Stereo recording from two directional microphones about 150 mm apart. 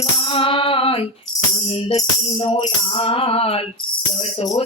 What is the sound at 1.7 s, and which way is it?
Music, 40° left (ahead or behind).